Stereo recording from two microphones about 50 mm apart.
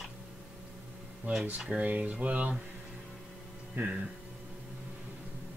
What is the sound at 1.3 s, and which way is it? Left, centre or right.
Speech, right.